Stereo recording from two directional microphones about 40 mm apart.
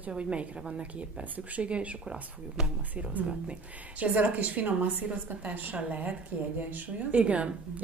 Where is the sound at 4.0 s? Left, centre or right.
Right.